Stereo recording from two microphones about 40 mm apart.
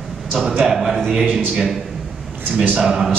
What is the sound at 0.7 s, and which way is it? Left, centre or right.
Speech, centre.